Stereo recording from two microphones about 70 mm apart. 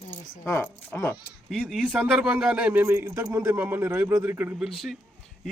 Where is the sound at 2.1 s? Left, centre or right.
Centre.